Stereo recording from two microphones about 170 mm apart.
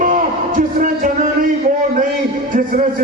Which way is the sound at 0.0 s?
50° right (ahead or behind).